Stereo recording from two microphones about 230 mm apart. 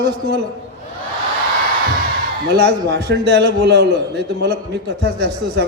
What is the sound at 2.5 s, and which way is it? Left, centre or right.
A man's voice, right.